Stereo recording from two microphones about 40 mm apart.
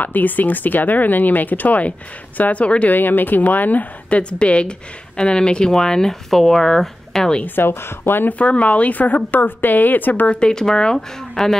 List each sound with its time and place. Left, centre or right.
0.0 s speech: left
2.9 s speech: left
4.1 s speech: left; by 7.2 s centre
7.4 s speech: left
8.3 s speech: left
10.2 s speech: left
10.5 s speech: centre